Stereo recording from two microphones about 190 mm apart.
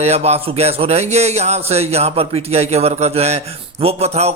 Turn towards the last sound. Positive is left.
turn(degrees=-35)  # may be behind; listen again after turning